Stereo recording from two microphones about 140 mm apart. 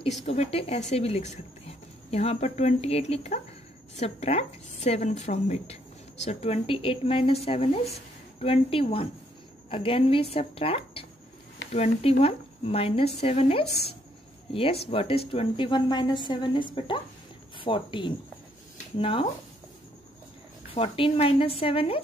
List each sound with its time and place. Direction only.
0.0 s a woman's voice: 50° left (ahead or behind)
20.7 s speech: 45° left (ahead or behind)